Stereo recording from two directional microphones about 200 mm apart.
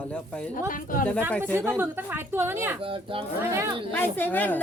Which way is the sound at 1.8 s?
10° right (ahead or behind).